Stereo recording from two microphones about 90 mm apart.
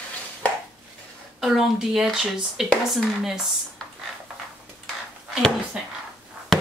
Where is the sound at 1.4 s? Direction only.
5° right (ahead or behind).